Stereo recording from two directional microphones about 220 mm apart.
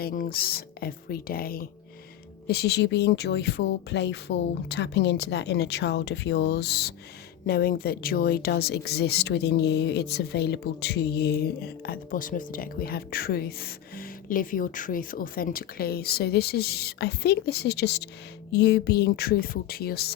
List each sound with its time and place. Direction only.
0.0 s speech: 40° left (ahead or behind)